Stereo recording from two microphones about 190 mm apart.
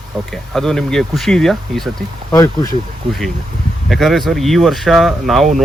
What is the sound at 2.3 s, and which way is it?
Speech, 20° left (ahead or behind).